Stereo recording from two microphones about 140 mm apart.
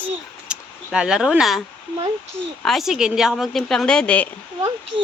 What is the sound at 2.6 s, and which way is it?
Speech, centre (ahead or behind).